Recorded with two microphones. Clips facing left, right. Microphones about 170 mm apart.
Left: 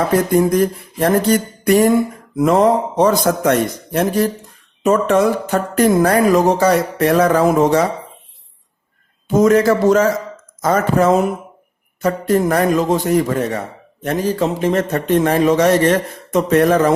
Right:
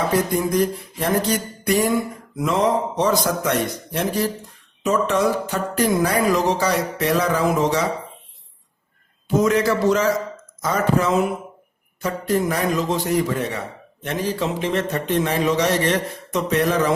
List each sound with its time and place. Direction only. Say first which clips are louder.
0.3 s a man's voice: left 6 dB; 50° left (ahead or behind)
9.3 s a man's voice: left 6 dB; 45° left (ahead or behind)